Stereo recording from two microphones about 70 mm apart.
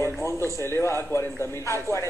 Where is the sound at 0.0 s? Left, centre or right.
Left.